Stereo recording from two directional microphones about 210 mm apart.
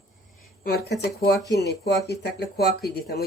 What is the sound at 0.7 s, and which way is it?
Speech, 50° left (ahead or behind).